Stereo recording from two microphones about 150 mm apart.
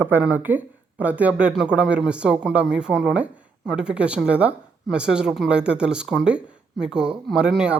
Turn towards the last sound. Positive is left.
turn(degrees=-5)  # may be behind; listen again after turning